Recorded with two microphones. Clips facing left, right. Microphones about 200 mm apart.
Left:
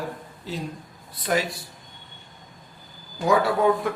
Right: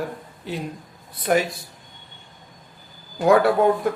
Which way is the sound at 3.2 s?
55° right (ahead or behind).